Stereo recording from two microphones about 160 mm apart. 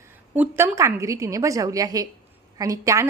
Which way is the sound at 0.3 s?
15° right (ahead or behind).